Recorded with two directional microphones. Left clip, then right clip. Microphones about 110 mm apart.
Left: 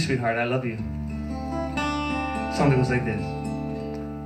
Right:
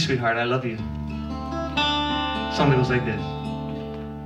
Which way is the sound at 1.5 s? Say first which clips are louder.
Right 1 dB; 25° right (ahead or behind).